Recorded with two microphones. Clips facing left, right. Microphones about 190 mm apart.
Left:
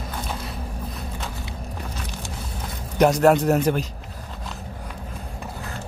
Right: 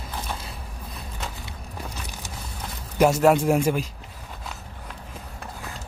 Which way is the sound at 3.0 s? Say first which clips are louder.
Left 1 dB; 5° right (ahead or behind).